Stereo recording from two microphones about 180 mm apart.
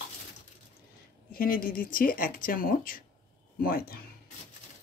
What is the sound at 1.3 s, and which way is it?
Speech, 55° left (ahead or behind).